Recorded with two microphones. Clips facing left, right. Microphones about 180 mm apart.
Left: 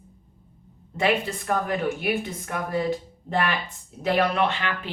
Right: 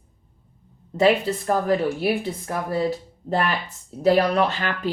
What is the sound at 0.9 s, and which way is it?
Speech, 35° right (ahead or behind).